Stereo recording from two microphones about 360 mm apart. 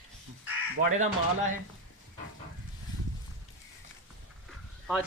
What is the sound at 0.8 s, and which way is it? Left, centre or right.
Speech, centre.